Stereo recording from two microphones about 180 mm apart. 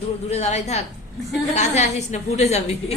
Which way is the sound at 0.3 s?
40° left (ahead or behind).